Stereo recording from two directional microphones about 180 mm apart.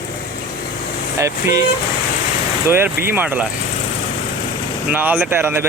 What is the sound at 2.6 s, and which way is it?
Speech, 10° right (ahead or behind).